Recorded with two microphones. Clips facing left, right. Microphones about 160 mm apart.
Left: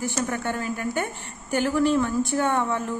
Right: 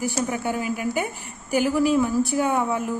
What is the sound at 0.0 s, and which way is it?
A woman's voice, 10° right (ahead or behind).